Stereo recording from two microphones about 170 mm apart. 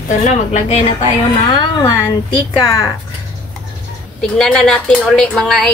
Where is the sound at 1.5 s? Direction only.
20° left (ahead or behind).